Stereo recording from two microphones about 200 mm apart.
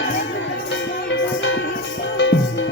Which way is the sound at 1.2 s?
70° left (ahead or behind).